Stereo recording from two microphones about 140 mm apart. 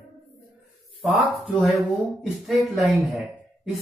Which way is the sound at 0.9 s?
5° right (ahead or behind).